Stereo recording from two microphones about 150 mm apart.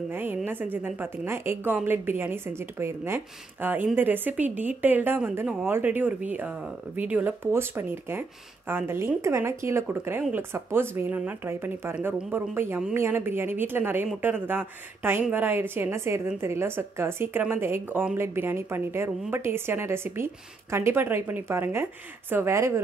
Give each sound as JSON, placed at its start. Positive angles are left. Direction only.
{"t": 0.1, "sound": "speech", "side_deg": -15}